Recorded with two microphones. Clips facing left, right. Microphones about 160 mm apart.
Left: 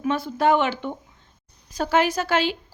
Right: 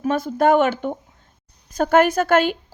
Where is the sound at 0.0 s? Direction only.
45° right (ahead or behind).